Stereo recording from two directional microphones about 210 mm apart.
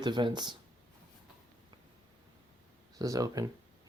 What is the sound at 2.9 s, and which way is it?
Speech, 15° right (ahead or behind).